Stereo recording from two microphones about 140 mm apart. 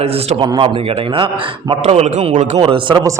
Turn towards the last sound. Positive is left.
turn(degrees=-35)  # may be behind; listen again after turning